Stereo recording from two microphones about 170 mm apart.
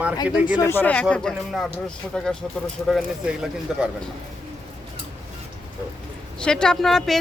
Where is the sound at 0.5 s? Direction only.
15° left (ahead or behind).